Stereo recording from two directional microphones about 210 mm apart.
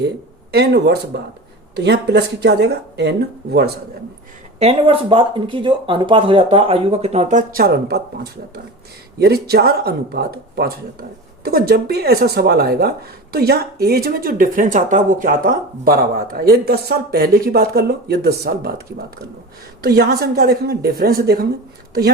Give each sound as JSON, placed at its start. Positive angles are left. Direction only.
{"t": 0.5, "sound": "speech", "side_deg": -50}
{"t": 4.6, "sound": "speech", "side_deg": -25}
{"t": 19.8, "sound": "speech", "side_deg": -50}